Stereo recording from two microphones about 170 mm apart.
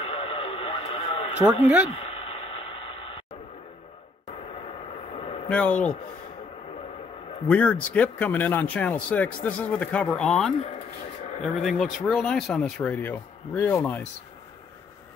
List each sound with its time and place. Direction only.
0.0 s radio: 35° left (ahead or behind)
1.4 s speech: 10° right (ahead or behind)
1.9 s a sound: 35° left (ahead or behind)
5.1 s a sound: 30° left (ahead or behind)
5.5 s speech: 10° left (ahead or behind)
7.4 s speech: 10° left (ahead or behind)